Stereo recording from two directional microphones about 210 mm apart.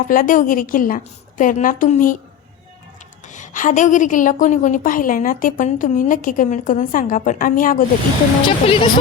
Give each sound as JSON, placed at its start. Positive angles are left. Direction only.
{"t": 0.1, "sound": "a woman's voice", "side_deg": 40}
{"t": 3.3, "sound": "a woman's voice", "side_deg": 35}
{"t": 8.4, "sound": "speech", "side_deg": 25}